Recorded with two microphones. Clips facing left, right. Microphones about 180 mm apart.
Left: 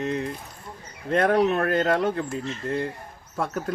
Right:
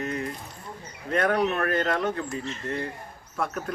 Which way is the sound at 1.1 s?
30° left (ahead or behind).